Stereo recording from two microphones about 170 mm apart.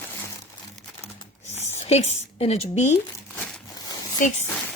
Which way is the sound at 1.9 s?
40° left (ahead or behind).